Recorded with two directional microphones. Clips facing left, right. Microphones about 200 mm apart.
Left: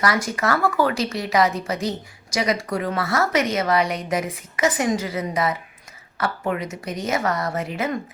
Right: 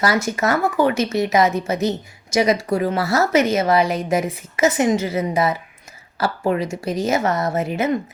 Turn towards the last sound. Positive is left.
turn(degrees=-25)  # may be behind; listen again after turning